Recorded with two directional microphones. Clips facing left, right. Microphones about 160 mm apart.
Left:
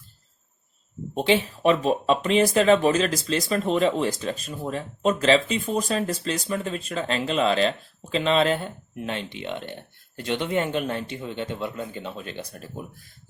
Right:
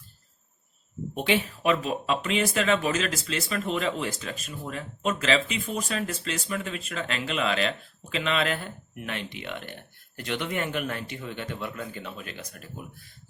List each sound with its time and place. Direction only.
1.1 s speech: 30° left (ahead or behind)